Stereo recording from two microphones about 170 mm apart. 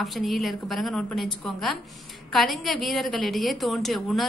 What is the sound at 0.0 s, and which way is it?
A woman's voice, centre (ahead or behind).